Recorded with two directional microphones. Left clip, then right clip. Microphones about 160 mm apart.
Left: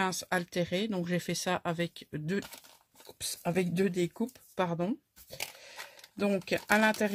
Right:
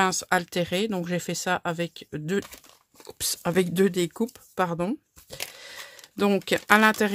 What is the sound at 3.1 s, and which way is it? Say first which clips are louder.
Speech: right 7 dB; 45° right (ahead or behind).